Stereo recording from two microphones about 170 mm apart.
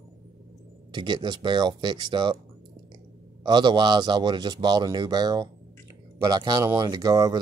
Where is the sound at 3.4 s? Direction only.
25° right (ahead or behind).